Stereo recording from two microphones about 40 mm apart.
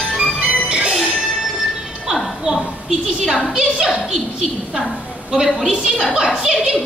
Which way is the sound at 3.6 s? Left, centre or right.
Right.